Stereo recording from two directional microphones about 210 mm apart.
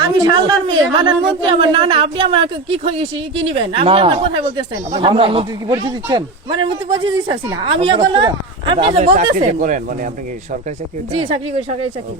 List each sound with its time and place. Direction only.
0.0 s a woman's voice: 20° right (ahead or behind); by 10.1 s 40° right (ahead or behind)
11.1 s a woman's voice: 25° right (ahead or behind)